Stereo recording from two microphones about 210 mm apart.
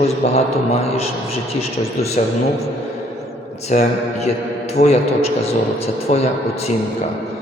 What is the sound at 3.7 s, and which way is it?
A man's voice, 35° left (ahead or behind).